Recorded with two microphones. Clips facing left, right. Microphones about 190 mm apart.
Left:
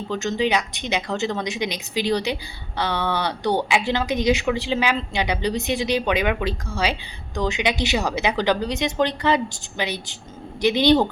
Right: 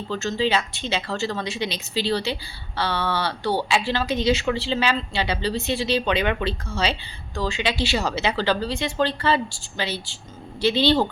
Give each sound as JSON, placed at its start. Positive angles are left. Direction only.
{"t": 0.1, "sound": "speech", "side_deg": 15}